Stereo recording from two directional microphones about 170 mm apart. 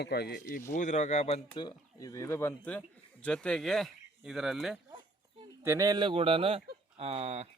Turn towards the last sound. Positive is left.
turn(degrees=-40)  # may be behind; listen again after turning